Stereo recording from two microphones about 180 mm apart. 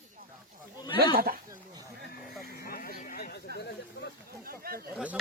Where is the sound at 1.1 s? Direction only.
55° right (ahead or behind).